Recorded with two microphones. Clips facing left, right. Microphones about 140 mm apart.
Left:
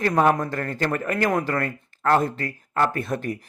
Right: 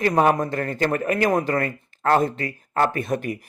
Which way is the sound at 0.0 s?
20° right (ahead or behind).